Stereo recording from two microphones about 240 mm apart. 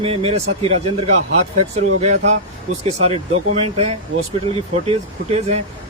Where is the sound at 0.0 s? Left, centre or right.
Right.